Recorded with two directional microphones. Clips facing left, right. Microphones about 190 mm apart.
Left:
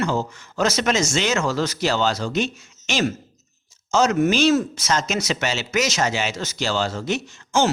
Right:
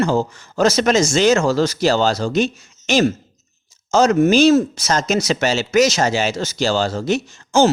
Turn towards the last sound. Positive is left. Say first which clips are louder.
# right 6 dB
turn(degrees=-35)  # may be behind; listen again after turning